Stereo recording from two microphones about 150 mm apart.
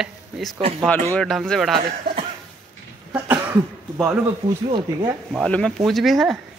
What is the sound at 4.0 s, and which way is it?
Speech, 15° right (ahead or behind).